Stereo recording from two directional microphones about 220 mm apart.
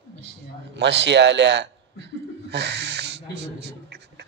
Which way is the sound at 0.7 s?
55° right (ahead or behind).